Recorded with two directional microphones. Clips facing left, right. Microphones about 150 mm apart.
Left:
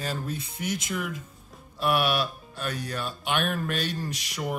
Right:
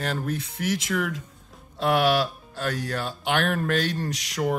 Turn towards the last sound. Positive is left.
turn(degrees=-90)